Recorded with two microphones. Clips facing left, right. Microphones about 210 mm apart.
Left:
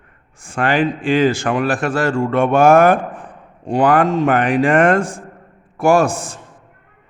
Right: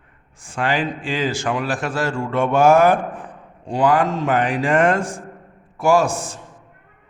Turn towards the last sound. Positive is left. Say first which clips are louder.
# left 3 dB
turn(degrees=55)  # may be behind; listen again after turning